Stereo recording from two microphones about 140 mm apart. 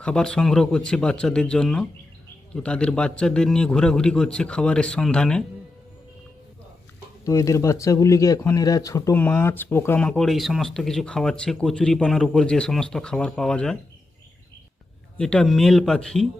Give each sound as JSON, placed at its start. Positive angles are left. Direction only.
{"t": 0.0, "sound": "speech", "side_deg": 5}
{"t": 7.3, "sound": "speech", "side_deg": 20}
{"t": 10.1, "sound": "speech", "side_deg": 5}
{"t": 15.2, "sound": "speech", "side_deg": 5}